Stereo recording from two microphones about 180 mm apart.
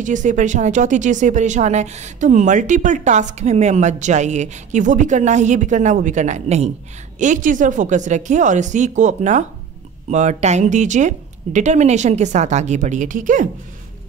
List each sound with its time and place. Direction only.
0.0 s speech: 45° right (ahead or behind)